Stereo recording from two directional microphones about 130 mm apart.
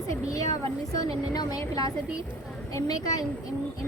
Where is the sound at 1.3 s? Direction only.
30° left (ahead or behind).